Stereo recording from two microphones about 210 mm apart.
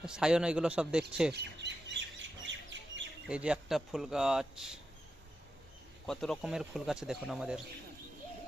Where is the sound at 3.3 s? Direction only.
5° right (ahead or behind).